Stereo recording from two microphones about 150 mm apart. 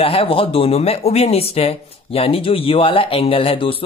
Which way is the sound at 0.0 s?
40° left (ahead or behind).